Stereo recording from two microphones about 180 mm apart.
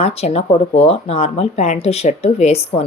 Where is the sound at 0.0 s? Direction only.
35° left (ahead or behind).